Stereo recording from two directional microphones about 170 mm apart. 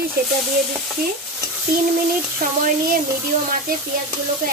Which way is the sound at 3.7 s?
60° right (ahead or behind).